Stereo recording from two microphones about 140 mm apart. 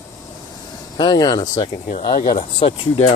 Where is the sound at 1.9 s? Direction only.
45° left (ahead or behind).